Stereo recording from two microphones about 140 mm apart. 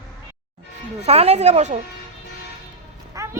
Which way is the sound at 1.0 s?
50° right (ahead or behind).